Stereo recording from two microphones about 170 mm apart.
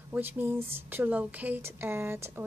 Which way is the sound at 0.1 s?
10° right (ahead or behind).